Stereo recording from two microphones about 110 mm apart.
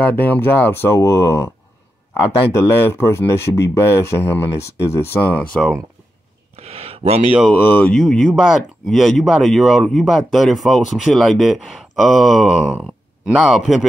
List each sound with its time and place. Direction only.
0.0 s speech: 15° left (ahead or behind)
6.5 s a sound: 65° right (ahead or behind)
7.5 s speech: 15° left (ahead or behind)
7.9 s speech: 5° left (ahead or behind)